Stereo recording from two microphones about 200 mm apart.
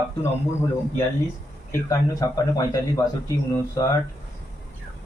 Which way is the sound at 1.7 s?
15° left (ahead or behind).